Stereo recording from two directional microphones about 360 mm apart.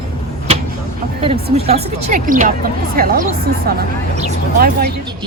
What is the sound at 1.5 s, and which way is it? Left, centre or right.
Speech, centre.